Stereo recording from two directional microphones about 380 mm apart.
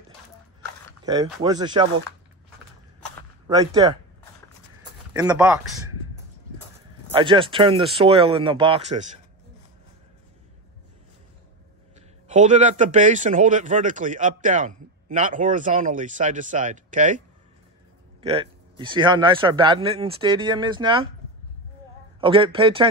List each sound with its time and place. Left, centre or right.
1.0 s a man's voice: centre
3.4 s a man's voice: centre
5.1 s a man's voice: centre
7.1 s a man's voice: centre
12.3 s speech: centre
18.2 s a man's voice: centre
22.2 s a man's voice: centre